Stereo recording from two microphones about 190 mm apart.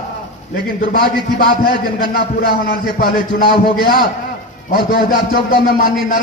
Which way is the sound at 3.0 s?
50° left (ahead or behind).